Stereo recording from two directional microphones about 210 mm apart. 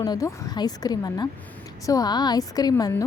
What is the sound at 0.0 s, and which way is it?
A woman's voice, 15° left (ahead or behind).